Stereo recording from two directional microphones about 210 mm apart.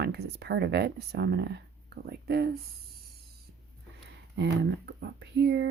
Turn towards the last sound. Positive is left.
turn(degrees=-55)  # may be behind; listen again after turning